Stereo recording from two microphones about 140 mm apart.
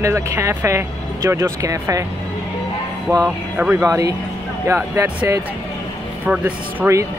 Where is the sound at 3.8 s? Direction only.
25° right (ahead or behind).